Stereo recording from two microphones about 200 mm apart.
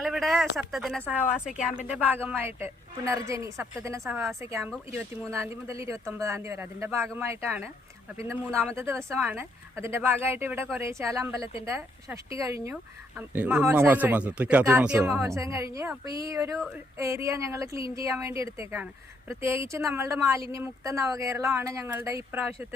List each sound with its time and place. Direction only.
0.0 s speech: centre (ahead or behind)
8.4 s speech: 5° left (ahead or behind)
8.7 s speech: 15° right (ahead or behind)